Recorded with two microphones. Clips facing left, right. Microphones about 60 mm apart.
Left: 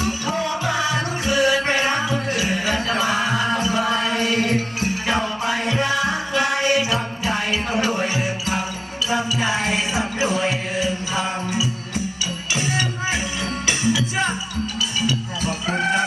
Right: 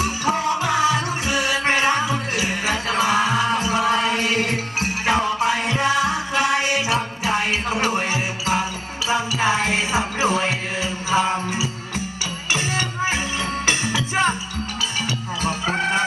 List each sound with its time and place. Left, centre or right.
0.0 s music: right
1.3 s music: left
2.4 s music: right
3.8 s music: right
5.4 s music: right